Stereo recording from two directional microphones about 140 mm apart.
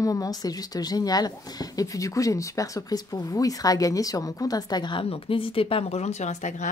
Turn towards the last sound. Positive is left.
turn(degrees=55)  # may be behind; listen again after turning